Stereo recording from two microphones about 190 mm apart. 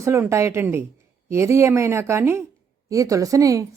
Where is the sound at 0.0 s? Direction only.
15° right (ahead or behind).